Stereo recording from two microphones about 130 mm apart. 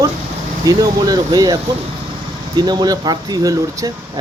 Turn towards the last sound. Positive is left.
turn(degrees=-30)  # may be behind; listen again after turning